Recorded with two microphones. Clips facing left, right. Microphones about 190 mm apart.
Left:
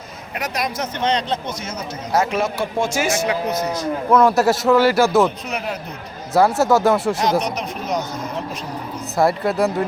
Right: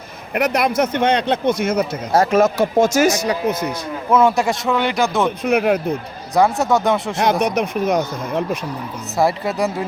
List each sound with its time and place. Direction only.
0.3 s speech: 60° right (ahead or behind)
2.1 s a man's voice: 40° right (ahead or behind)
4.1 s a man's voice: centre (ahead or behind)
5.4 s speech: 55° right (ahead or behind)
6.3 s a man's voice: 5° left (ahead or behind)
7.2 s speech: 55° right (ahead or behind)
9.1 s a man's voice: centre (ahead or behind)